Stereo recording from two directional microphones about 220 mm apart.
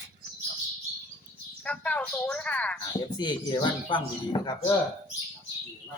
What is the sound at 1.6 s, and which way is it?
Speech, 5° left (ahead or behind).